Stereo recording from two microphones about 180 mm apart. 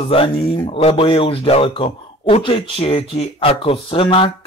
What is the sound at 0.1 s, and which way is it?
Speech, 30° left (ahead or behind).